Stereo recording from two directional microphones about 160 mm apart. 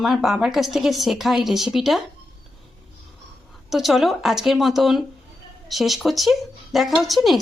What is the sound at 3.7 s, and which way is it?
A woman's voice, centre (ahead or behind).